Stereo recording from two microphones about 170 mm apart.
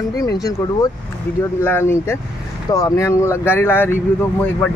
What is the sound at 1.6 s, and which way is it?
Speech, 15° left (ahead or behind).